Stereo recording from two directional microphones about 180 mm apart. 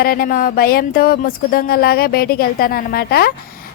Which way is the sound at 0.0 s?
55° left (ahead or behind).